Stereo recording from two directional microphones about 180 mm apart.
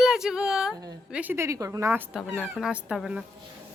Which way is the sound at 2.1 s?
Centre (ahead or behind).